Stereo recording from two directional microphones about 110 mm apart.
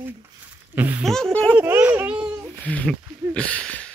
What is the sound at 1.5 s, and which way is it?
Speech, 20° right (ahead or behind).